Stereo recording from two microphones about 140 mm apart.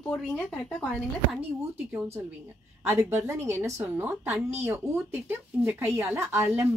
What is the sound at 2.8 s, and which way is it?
A woman's voice, 15° right (ahead or behind).